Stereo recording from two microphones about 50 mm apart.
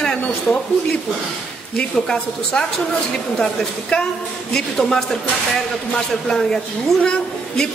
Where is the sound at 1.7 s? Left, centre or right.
Centre.